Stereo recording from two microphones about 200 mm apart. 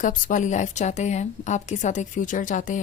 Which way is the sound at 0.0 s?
40° left (ahead or behind).